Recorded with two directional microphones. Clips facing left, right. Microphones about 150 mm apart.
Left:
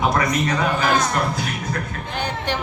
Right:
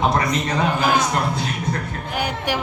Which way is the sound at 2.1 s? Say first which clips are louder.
Right 1 dB; 10° right (ahead or behind).